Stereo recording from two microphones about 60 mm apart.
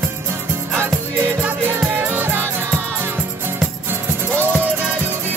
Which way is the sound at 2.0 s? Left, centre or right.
Right.